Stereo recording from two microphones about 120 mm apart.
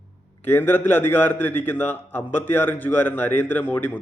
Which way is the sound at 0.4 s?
20° left (ahead or behind).